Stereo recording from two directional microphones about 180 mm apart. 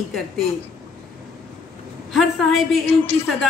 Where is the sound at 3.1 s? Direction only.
10° left (ahead or behind).